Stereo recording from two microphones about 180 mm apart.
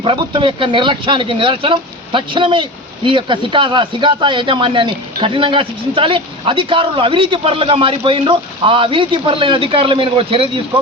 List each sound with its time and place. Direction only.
0.0 s speech: 25° right (ahead or behind)